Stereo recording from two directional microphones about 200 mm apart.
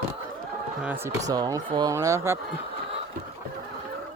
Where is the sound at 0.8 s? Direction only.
10° right (ahead or behind).